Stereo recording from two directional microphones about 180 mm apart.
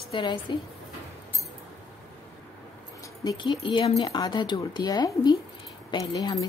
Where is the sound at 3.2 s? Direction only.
25° left (ahead or behind).